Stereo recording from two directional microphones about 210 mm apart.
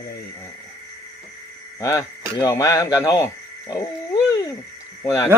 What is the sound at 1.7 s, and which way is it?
Speech, 15° left (ahead or behind).